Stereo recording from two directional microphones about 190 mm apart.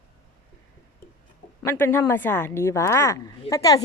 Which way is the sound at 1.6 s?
10° left (ahead or behind).